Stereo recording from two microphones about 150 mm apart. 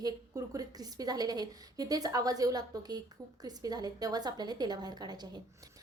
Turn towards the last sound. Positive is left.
turn(degrees=-25)  # may be behind; listen again after turning